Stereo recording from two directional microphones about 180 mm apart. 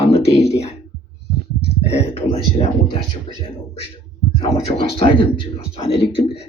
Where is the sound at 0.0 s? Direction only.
35° left (ahead or behind).